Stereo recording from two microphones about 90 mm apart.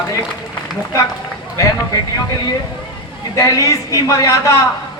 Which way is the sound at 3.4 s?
35° left (ahead or behind).